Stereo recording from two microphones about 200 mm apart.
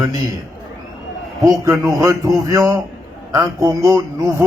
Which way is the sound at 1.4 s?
15° right (ahead or behind).